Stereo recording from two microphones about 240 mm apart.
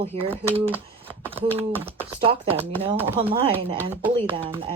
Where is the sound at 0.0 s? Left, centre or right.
Right.